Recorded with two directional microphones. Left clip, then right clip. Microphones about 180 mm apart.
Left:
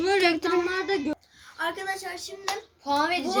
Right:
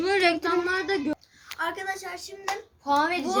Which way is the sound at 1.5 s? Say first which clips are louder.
Even; 15° right (ahead or behind).